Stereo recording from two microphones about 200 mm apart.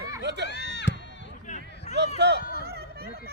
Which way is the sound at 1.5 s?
35° left (ahead or behind).